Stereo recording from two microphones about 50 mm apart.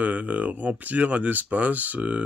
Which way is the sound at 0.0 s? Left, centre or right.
Right.